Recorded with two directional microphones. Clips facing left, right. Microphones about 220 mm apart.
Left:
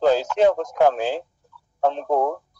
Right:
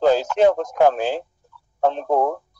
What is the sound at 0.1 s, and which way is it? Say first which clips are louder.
Radio: right 1 dB; 55° right (ahead or behind).